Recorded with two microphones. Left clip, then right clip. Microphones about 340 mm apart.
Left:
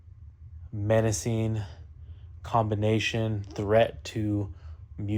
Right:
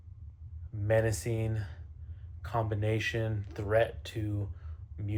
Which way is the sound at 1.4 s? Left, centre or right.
Left.